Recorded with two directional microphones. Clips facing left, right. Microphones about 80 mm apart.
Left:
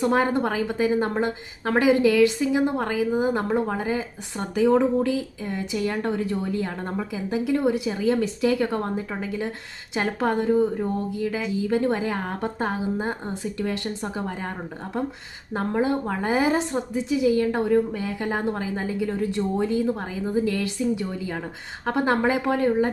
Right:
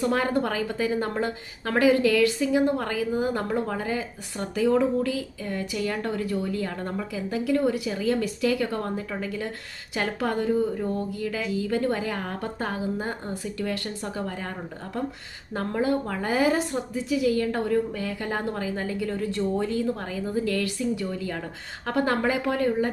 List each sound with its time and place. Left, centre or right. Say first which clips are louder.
0.0 s a woman's voice: left 3 dB; left
15.5 s a woman's voice: left 2 dB; left